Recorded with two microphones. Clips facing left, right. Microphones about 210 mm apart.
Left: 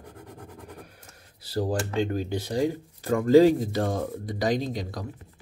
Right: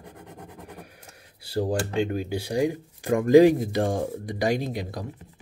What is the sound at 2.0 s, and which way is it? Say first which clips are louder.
Speech: right 1 dB; 10° right (ahead or behind).